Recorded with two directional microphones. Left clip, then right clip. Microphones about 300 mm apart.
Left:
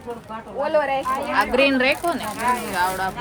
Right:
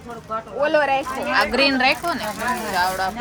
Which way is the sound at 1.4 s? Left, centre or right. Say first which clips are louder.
Right 1 dB; centre.